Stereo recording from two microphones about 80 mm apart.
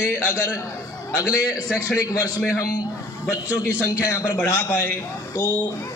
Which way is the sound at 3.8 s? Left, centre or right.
Left.